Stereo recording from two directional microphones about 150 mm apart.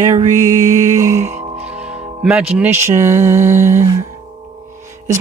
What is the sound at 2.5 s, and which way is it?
Speech, 10° right (ahead or behind).